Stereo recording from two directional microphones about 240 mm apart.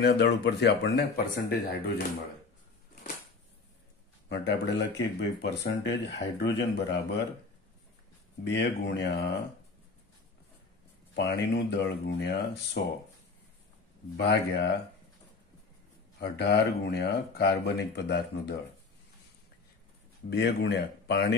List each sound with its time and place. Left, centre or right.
0.0 s speech: left
4.3 s speech: left
8.5 s speech: left
11.1 s speech: left
14.1 s speech: left
16.2 s speech: left
20.2 s speech: left